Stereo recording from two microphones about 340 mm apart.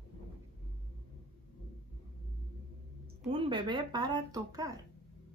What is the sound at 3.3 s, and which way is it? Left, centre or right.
A woman's voice, centre.